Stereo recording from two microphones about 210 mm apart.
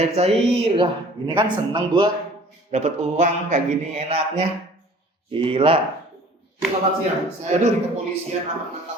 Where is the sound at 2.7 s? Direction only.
35° right (ahead or behind).